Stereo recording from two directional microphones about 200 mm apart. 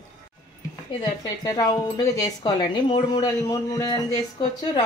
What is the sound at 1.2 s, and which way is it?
Speech, 20° left (ahead or behind).